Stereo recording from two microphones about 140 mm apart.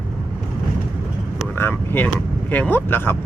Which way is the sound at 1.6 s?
15° left (ahead or behind).